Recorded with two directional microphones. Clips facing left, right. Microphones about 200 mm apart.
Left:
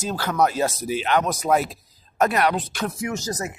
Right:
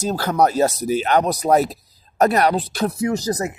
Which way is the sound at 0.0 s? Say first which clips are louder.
Right 4 dB; 40° right (ahead or behind).